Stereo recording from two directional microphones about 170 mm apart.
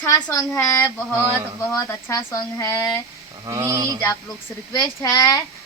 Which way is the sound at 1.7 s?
15° left (ahead or behind).